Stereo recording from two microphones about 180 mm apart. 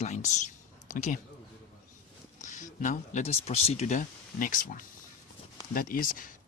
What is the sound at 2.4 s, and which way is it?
Speech, 45° left (ahead or behind).